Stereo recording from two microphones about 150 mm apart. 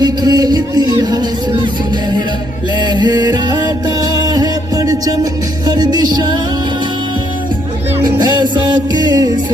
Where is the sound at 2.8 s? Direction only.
30° right (ahead or behind).